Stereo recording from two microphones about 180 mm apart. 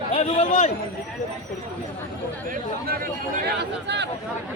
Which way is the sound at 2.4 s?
50° right (ahead or behind).